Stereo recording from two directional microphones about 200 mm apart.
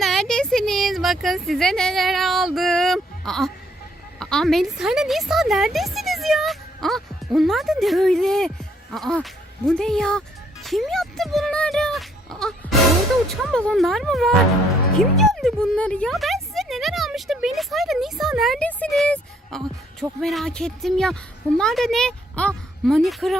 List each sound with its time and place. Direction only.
0.0 s a sound: centre (ahead or behind)
4.2 s speech: 5° left (ahead or behind)
6.8 s music: centre (ahead or behind)
13.2 s a woman's voice: centre (ahead or behind)